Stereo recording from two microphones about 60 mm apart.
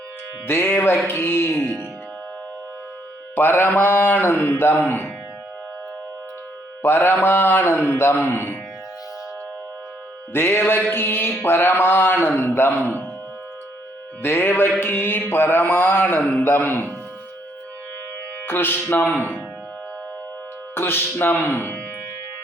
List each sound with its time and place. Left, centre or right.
0.4 s a man's voice: left
3.3 s a man's voice: left
6.8 s a man's voice: left
10.3 s a man's voice: left
14.2 s a man's voice: left
18.4 s a man's voice: left
20.7 s a man's voice: left